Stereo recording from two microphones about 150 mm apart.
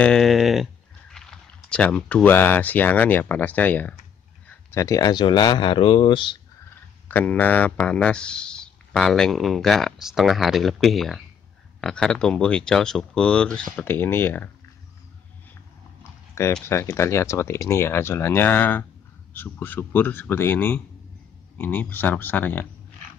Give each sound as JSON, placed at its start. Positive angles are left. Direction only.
{"t": 0.0, "sound": "speech", "side_deg": 5}
{"t": 7.1, "sound": "speech", "side_deg": 10}
{"t": 16.0, "sound": "a sound", "side_deg": 20}
{"t": 16.6, "sound": "speech", "side_deg": 15}